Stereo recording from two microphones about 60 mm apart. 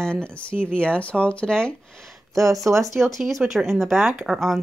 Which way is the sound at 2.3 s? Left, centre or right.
Right.